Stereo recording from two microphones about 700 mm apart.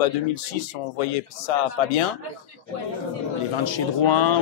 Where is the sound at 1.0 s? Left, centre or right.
Left.